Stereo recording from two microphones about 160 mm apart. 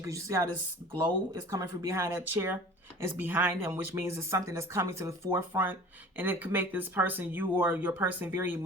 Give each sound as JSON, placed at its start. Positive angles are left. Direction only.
{"t": 0.0, "sound": "speech", "side_deg": -20}
{"t": 1.5, "sound": "speech", "side_deg": -20}